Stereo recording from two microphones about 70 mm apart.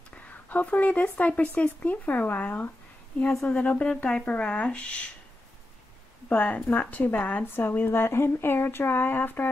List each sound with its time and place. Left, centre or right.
0.1 s speech: left
6.2 s speech: left